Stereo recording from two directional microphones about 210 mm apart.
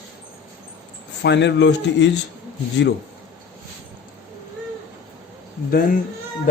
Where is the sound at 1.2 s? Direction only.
55° left (ahead or behind).